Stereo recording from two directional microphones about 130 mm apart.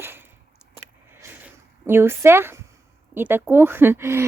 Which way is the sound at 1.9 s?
20° right (ahead or behind).